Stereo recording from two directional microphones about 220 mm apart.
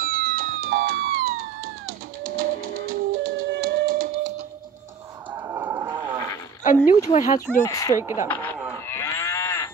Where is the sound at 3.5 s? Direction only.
45° right (ahead or behind).